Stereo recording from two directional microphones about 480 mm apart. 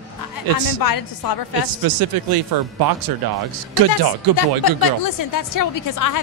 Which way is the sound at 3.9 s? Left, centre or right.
Left.